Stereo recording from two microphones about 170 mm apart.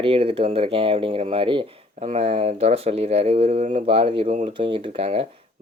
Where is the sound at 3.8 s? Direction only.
30° right (ahead or behind).